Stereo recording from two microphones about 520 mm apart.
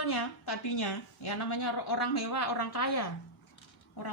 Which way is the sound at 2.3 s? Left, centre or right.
Left.